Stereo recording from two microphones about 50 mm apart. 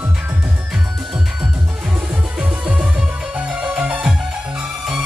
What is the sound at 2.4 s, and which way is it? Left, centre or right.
Music, right.